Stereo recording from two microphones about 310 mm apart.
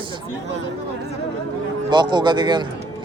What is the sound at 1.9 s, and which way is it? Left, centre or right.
Speech, centre.